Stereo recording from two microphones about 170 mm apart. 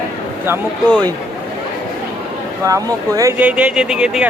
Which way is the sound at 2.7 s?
20° right (ahead or behind).